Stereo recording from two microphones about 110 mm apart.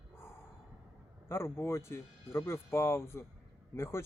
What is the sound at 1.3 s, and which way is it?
Speech, 20° left (ahead or behind).